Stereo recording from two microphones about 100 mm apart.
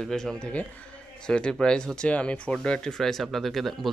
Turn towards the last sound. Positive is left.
turn(degrees=0)  # may be behind; listen again after turning